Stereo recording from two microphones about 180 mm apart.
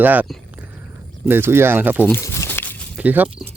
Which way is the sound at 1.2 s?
10° right (ahead or behind).